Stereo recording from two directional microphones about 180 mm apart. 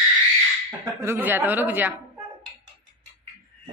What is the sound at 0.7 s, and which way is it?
Speech, 15° right (ahead or behind).